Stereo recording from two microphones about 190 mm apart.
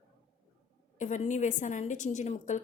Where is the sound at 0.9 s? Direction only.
40° left (ahead or behind).